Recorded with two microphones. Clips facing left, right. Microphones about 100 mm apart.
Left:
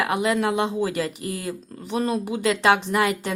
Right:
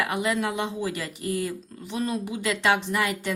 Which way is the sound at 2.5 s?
55° left (ahead or behind).